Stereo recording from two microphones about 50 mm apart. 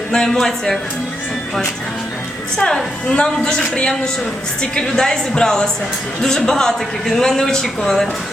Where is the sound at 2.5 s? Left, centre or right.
Centre.